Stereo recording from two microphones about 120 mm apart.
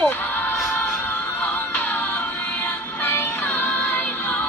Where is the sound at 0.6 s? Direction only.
15° left (ahead or behind).